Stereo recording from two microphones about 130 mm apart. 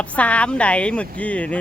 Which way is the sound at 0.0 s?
10° left (ahead or behind).